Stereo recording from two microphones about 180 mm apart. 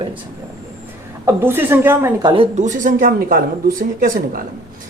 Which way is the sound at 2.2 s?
30° right (ahead or behind).